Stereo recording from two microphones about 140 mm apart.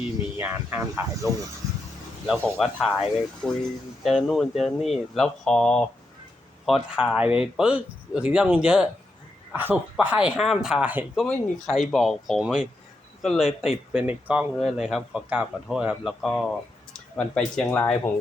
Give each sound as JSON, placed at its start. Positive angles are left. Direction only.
{"t": 0.3, "sound": "speech", "side_deg": -15}
{"t": 1.6, "sound": "vehicle", "side_deg": -25}
{"t": 2.4, "sound": "speech", "side_deg": 10}
{"t": 2.8, "sound": "speech", "side_deg": 0}
{"t": 6.7, "sound": "speech", "side_deg": -5}
{"t": 11.2, "sound": "speech", "side_deg": 5}